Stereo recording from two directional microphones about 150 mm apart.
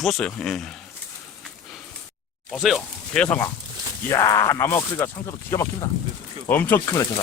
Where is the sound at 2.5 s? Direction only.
Centre (ahead or behind).